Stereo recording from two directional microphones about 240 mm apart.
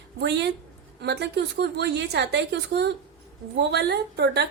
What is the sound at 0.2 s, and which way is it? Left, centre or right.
A woman's voice, right.